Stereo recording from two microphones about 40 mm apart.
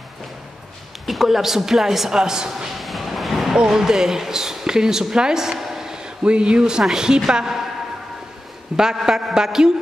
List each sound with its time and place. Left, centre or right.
1.0 s a man's voice: centre
2.7 s a sound: centre
3.5 s speech: centre
6.2 s a man's voice: right
8.7 s a man's voice: centre